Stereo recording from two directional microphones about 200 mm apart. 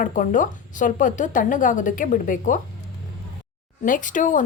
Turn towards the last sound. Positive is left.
turn(degrees=40)  # may be behind; listen again after turning